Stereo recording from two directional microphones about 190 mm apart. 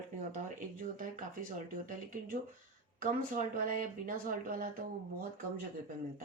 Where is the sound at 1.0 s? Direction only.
45° right (ahead or behind).